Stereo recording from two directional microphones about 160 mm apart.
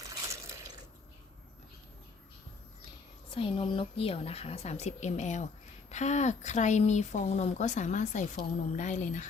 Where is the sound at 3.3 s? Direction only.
35° left (ahead or behind).